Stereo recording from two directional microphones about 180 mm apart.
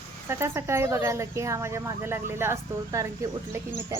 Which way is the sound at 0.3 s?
15° right (ahead or behind).